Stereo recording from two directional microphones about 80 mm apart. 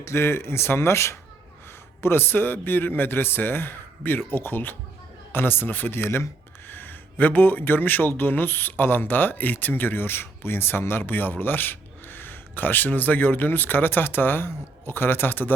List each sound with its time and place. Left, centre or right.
0.0 s speech: left